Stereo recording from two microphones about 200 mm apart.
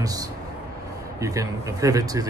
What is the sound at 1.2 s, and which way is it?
A man's voice, 15° right (ahead or behind).